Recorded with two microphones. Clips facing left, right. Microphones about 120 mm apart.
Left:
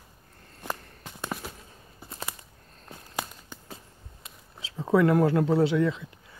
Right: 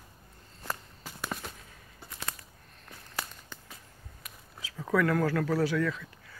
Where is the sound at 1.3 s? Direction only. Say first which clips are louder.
Left 3 dB; 5° left (ahead or behind).